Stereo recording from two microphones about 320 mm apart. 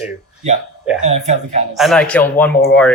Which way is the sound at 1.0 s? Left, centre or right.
Right.